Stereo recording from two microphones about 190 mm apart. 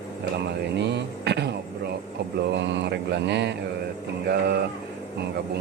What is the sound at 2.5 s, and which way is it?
Mantra, 65° right (ahead or behind).